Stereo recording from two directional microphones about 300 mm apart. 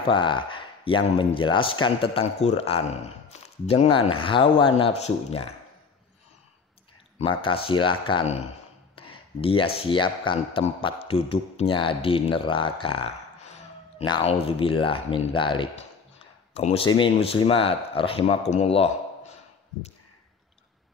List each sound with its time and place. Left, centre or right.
0.0 s speech: centre
7.2 s speech: centre